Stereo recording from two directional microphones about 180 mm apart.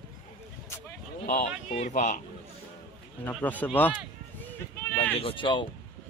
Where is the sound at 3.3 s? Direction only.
10° left (ahead or behind).